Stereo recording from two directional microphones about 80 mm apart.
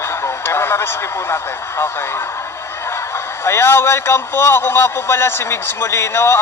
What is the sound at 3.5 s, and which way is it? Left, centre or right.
Speech, left.